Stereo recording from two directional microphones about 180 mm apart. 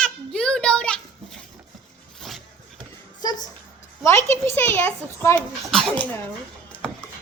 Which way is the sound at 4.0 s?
15° left (ahead or behind).